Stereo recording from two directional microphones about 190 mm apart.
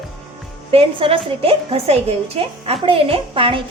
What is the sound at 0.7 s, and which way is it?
A woman's voice, 30° right (ahead or behind).